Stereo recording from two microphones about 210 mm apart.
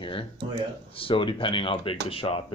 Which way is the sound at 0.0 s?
25° left (ahead or behind).